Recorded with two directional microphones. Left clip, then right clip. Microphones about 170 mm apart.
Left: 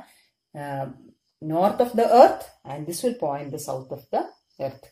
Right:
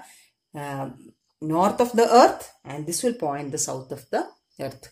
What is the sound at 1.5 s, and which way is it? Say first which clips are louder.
Speech: even; 50° right (ahead or behind).